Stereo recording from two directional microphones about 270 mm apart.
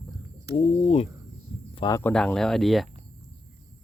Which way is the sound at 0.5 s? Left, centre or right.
Left.